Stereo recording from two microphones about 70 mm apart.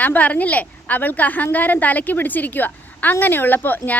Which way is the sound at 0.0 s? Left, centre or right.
Left.